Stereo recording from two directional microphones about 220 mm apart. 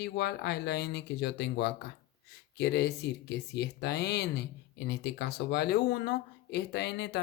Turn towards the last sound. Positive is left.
turn(degrees=50)  # may be behind; listen again after turning